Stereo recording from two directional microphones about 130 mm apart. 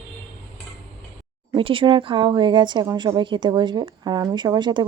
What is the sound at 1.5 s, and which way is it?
Speech, 40° right (ahead or behind).